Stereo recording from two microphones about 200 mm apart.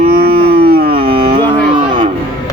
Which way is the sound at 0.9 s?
25° right (ahead or behind).